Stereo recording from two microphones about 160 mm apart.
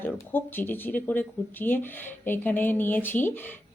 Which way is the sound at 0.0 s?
10° left (ahead or behind).